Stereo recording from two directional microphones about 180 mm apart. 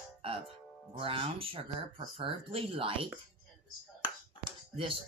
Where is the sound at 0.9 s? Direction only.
30° right (ahead or behind).